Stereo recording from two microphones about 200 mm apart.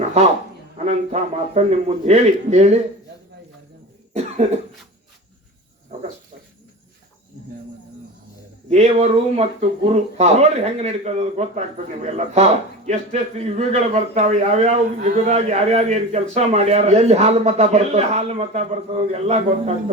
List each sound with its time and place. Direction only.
0.2 s a man's voice: 35° right (ahead or behind)
8.7 s a man's voice: 35° right (ahead or behind)